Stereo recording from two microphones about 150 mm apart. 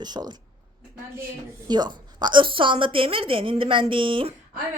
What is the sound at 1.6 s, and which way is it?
A woman's voice, 30° right (ahead or behind).